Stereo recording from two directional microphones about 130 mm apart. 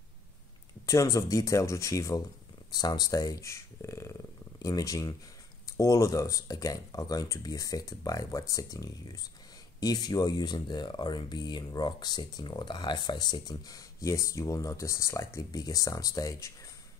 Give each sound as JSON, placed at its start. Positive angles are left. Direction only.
{"t": 0.8, "sound": "speech", "side_deg": 25}